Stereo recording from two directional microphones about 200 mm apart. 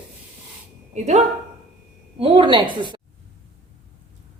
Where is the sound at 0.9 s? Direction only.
35° right (ahead or behind).